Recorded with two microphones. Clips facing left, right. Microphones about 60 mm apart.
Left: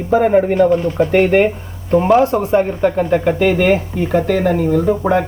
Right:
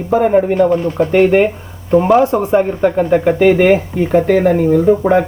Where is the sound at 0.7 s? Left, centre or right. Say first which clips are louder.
Even; right.